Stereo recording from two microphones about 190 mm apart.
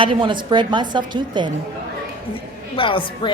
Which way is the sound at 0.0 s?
25° right (ahead or behind).